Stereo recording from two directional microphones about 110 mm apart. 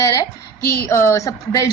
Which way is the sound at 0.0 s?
30° left (ahead or behind).